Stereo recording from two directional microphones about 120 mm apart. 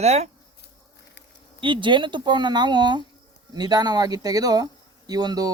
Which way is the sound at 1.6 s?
45° right (ahead or behind).